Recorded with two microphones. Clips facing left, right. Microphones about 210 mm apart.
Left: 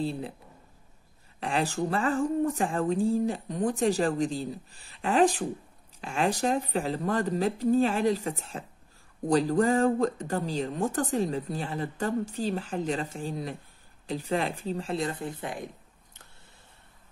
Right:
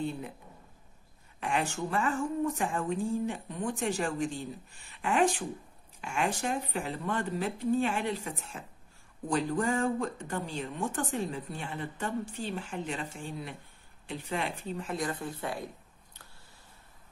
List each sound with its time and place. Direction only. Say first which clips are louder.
0.0 s speech: left 4 dB; 30° left (ahead or behind)
1.4 s speech: left 4 dB; 35° left (ahead or behind); by 15.7 s 20° left (ahead or behind)